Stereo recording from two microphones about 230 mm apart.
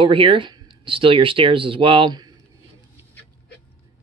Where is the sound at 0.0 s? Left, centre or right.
Right.